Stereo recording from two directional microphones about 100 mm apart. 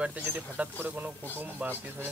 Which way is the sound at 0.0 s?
15° right (ahead or behind).